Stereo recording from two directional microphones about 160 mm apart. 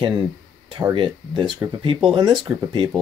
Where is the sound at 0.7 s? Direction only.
30° right (ahead or behind).